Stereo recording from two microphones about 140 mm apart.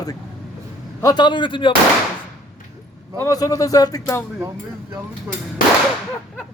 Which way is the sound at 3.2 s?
25° left (ahead or behind).